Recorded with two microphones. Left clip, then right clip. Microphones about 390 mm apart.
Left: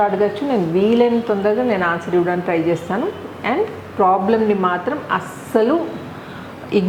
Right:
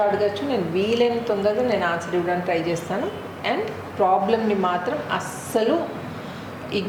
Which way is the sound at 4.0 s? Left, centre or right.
Left.